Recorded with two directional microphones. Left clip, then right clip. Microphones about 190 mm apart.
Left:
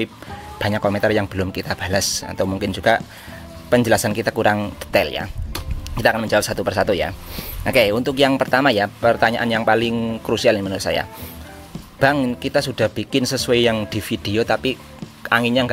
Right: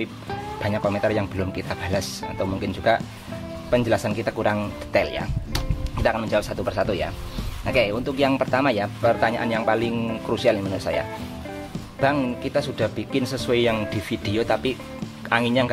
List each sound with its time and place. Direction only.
0.6 s speech: 40° left (ahead or behind)